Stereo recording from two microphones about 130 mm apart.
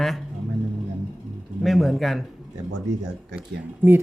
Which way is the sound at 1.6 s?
Centre (ahead or behind).